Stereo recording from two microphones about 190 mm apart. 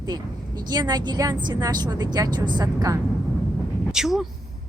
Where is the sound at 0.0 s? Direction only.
20° right (ahead or behind).